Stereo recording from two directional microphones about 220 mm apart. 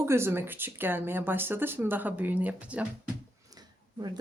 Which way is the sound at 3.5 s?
15° right (ahead or behind).